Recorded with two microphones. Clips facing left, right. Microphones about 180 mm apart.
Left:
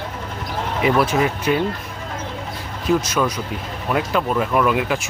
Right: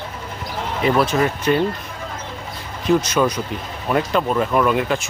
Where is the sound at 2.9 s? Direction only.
5° left (ahead or behind).